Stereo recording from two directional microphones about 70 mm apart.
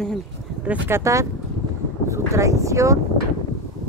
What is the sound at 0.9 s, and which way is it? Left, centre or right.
Speech, right.